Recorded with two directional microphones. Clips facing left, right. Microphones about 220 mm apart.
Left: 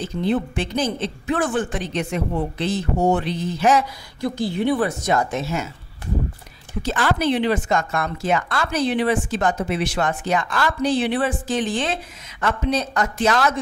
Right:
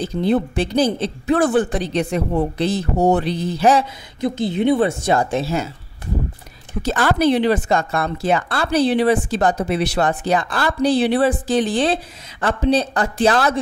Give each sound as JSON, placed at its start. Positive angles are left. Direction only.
{"t": 0.0, "sound": "speech", "side_deg": -35}
{"t": 4.2, "sound": "speech", "side_deg": -20}
{"t": 6.8, "sound": "speech", "side_deg": -40}